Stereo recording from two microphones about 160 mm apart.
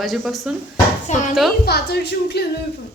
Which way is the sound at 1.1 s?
45° left (ahead or behind).